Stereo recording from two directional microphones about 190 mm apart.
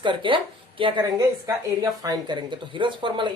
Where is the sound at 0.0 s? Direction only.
25° right (ahead or behind).